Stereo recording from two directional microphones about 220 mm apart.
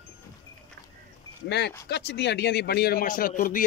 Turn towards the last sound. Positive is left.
turn(degrees=40)  # may be behind; listen again after turning